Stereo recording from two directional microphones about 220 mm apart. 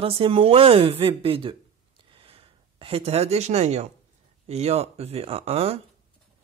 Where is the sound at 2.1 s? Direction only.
25° right (ahead or behind).